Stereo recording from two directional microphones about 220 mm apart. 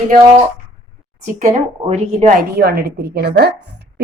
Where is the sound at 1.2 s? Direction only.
30° right (ahead or behind).